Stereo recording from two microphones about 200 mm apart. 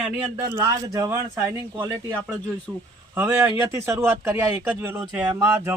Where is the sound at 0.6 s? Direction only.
15° right (ahead or behind).